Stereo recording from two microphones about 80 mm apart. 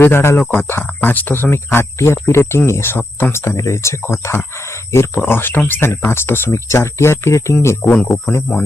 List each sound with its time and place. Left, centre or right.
0.0 s speech: left